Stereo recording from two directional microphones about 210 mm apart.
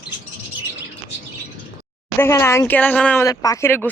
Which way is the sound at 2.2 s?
15° left (ahead or behind).